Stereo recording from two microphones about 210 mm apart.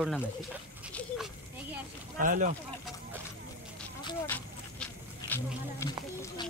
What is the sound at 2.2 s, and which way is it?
Speech, 40° right (ahead or behind).